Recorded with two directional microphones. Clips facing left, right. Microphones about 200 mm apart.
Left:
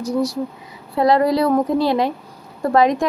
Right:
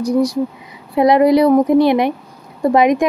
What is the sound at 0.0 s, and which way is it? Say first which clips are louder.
Speech: right 5 dB; 15° right (ahead or behind).